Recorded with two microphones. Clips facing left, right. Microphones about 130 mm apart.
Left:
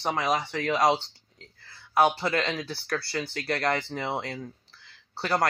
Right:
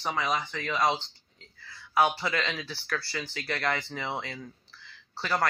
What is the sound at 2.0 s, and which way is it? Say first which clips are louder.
Speech: left 3 dB; 40° left (ahead or behind).